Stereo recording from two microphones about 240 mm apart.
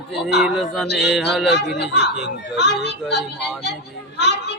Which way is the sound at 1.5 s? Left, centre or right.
Left.